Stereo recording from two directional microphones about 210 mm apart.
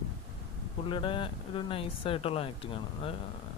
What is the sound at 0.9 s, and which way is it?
Speech, 25° left (ahead or behind).